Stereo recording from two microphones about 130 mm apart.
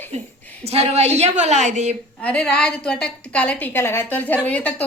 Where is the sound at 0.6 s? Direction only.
55° right (ahead or behind).